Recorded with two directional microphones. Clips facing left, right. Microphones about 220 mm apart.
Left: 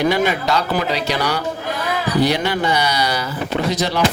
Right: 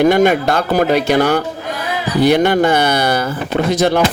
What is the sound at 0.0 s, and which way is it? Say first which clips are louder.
Speech: right 6 dB; 50° right (ahead or behind).